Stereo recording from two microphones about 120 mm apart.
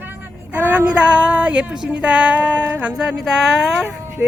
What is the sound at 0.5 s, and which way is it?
Speech, 15° right (ahead or behind).